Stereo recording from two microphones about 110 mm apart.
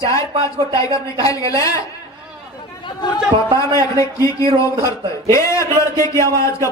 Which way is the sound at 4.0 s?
30° left (ahead or behind).